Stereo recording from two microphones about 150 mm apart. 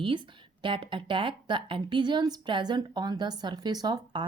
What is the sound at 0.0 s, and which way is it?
Speech, 35° right (ahead or behind).